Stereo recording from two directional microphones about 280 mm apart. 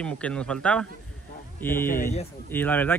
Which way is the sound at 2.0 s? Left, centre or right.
Left.